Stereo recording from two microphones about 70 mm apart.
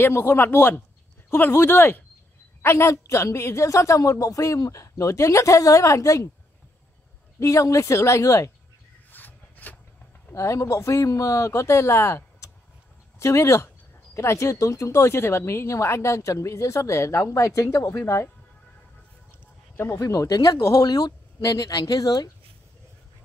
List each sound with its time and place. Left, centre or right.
0.0 s speech: left
7.3 s speech: left
9.1 s rub: left
10.3 s speech: left
19.9 s speech: left